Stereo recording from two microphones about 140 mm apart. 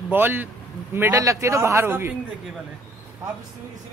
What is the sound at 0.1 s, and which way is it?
Speech, 15° right (ahead or behind).